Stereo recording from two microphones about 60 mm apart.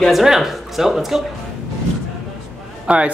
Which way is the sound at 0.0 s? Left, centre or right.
Centre.